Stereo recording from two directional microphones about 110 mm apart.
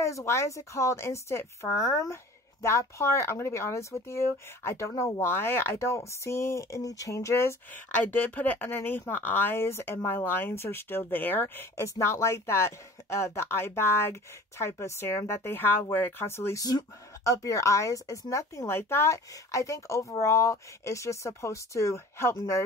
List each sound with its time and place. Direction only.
0.0 s speech: 25° left (ahead or behind)
16.6 s speech: 35° left (ahead or behind)